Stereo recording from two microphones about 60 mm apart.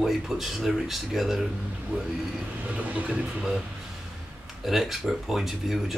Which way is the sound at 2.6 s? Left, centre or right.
Right.